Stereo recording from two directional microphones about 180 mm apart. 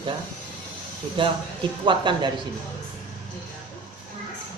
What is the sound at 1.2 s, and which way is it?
Speech, 25° right (ahead or behind).